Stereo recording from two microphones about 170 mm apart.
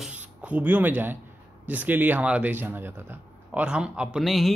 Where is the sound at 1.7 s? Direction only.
10° right (ahead or behind).